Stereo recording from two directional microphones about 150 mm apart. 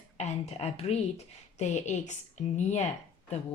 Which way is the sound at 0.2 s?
50° left (ahead or behind).